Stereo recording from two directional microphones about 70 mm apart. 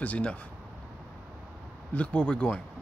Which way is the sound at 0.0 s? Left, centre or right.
Centre.